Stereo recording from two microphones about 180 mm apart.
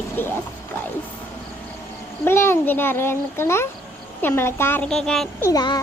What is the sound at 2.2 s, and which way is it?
A child's voice, 15° left (ahead or behind).